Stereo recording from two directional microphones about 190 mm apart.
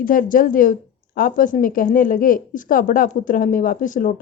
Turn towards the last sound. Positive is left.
turn(degrees=45)  # may be behind; listen again after turning